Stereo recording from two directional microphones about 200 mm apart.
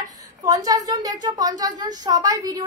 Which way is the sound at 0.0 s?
15° right (ahead or behind).